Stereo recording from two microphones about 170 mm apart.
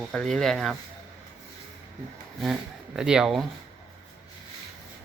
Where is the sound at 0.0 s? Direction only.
5° left (ahead or behind).